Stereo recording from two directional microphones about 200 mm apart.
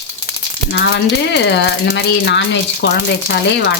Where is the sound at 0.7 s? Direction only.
60° left (ahead or behind).